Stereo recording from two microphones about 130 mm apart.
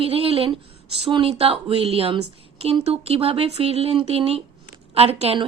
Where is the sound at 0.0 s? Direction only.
45° right (ahead or behind).